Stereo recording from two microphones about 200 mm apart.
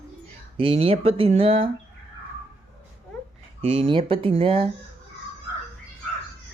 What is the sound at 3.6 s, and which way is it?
Speech, 30° right (ahead or behind).